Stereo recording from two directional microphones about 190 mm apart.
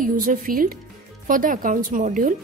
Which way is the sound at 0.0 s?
45° right (ahead or behind).